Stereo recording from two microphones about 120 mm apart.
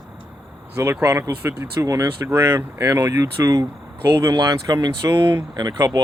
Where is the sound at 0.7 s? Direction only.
25° right (ahead or behind).